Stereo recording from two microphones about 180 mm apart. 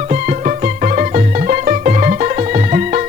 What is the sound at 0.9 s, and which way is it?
Music, 45° right (ahead or behind).